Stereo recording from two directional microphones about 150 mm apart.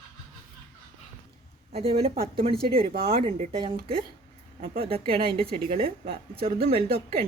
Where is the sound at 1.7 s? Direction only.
40° right (ahead or behind).